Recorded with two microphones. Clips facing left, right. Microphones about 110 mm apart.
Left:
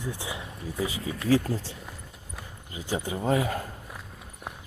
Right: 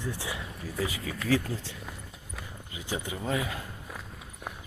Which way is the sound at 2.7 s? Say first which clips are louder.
Left 4 dB; 35° left (ahead or behind).